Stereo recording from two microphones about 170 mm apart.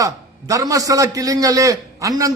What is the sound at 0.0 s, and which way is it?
A man's voice, 20° right (ahead or behind).